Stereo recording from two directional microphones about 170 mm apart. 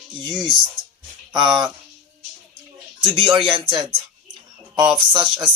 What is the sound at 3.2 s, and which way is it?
Speech, 30° right (ahead or behind).